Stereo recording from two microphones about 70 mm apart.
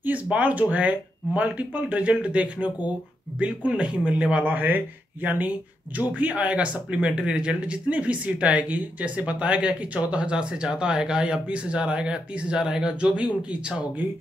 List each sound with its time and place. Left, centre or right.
0.0 s speech: right